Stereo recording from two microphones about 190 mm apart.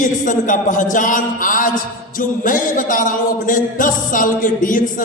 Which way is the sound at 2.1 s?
45° left (ahead or behind).